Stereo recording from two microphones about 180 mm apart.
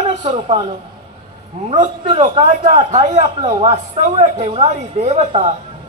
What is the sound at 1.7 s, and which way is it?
A man's voice, 30° right (ahead or behind).